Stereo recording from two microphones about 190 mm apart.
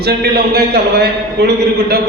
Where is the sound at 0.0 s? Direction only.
55° right (ahead or behind).